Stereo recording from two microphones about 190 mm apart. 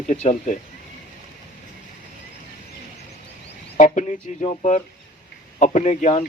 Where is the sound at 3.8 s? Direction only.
40° left (ahead or behind).